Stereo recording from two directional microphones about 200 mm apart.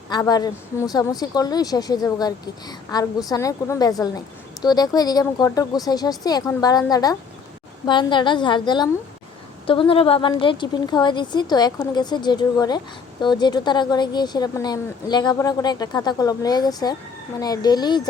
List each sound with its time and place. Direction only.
0.1 s speech: 20° left (ahead or behind)